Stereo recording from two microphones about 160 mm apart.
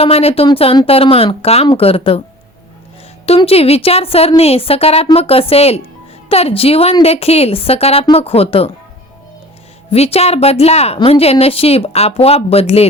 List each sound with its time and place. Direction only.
0.0 s a woman's voice: 40° left (ahead or behind)
3.2 s a woman's voice: 40° left (ahead or behind)
9.9 s a woman's voice: 40° left (ahead or behind)